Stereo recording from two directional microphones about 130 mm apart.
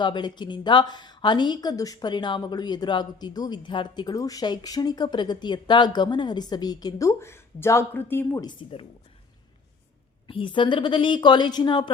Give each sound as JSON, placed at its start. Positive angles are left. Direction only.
{"t": 0.0, "sound": "a woman's voice", "side_deg": 35}
{"t": 8.6, "sound": "a woman's voice", "side_deg": 45}
{"t": 10.2, "sound": "a woman's voice", "side_deg": 40}